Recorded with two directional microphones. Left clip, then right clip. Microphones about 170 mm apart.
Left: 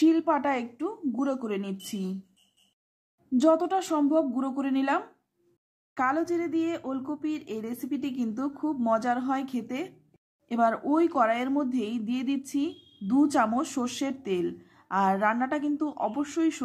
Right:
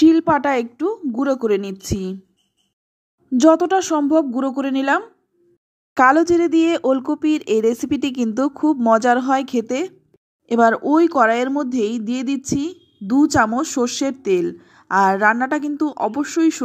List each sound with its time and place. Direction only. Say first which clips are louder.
0.0 s speech: right 9 dB; 35° right (ahead or behind)
3.3 s speech: right 9 dB; 35° right (ahead or behind)
5.9 s speech: right 14 dB; 45° right (ahead or behind); by 16.6 s 30° right (ahead or behind)